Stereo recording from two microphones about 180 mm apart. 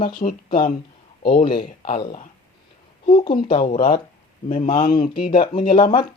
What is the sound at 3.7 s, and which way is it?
Speech, 55° left (ahead or behind).